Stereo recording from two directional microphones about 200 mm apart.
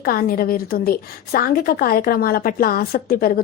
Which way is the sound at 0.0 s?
45° left (ahead or behind).